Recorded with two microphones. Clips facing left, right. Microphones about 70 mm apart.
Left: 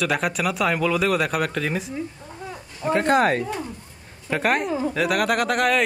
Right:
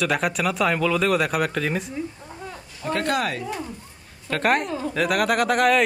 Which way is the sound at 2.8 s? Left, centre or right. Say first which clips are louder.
Left 4 dB; left.